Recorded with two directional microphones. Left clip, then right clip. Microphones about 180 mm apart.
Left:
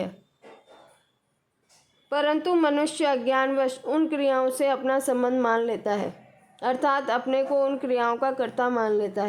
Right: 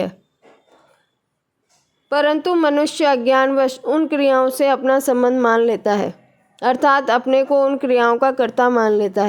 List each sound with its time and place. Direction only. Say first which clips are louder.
2.0 s speech: right 7 dB; 30° right (ahead or behind)